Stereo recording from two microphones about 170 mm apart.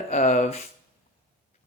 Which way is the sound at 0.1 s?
45° left (ahead or behind).